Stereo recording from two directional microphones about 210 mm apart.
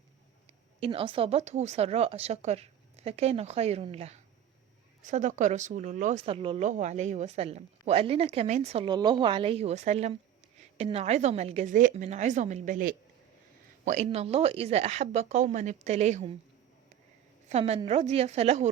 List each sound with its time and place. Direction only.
0.8 s speech: 25° right (ahead or behind)
17.5 s speech: 30° right (ahead or behind)